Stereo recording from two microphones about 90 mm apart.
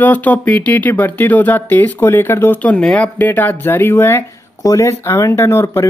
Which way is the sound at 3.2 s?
20° left (ahead or behind).